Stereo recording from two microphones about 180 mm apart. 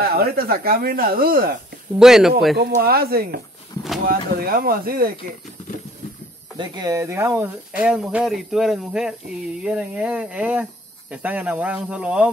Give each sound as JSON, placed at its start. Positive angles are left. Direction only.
{"t": 0.0, "sound": "speech", "side_deg": -55}
{"t": 2.0, "sound": "speech", "side_deg": -5}
{"t": 2.7, "sound": "speech", "side_deg": -55}
{"t": 3.7, "sound": "a sound", "side_deg": 20}
{"t": 4.1, "sound": "speech", "side_deg": -55}
{"t": 6.6, "sound": "speech", "side_deg": -25}